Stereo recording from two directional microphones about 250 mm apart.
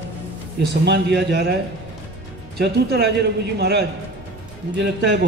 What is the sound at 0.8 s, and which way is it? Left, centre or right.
Speech, right.